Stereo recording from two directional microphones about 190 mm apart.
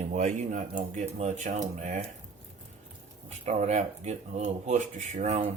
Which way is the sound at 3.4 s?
35° right (ahead or behind).